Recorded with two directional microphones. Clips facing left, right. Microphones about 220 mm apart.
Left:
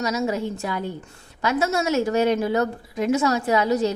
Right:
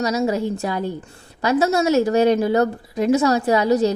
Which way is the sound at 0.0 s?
35° right (ahead or behind).